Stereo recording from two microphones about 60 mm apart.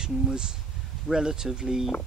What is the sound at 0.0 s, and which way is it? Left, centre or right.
Speech, centre.